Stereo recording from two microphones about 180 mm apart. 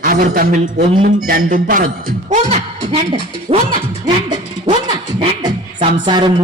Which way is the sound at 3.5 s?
35° right (ahead or behind).